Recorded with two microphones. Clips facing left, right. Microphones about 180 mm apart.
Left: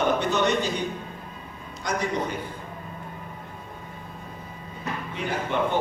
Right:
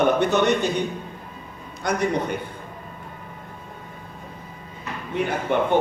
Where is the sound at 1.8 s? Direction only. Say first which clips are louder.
Right 4 dB; 60° right (ahead or behind).